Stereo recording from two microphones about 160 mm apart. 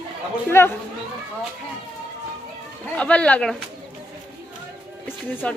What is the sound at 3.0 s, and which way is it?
Speech, 10° left (ahead or behind).